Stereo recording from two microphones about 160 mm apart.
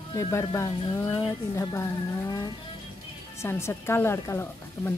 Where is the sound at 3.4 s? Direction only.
15° left (ahead or behind).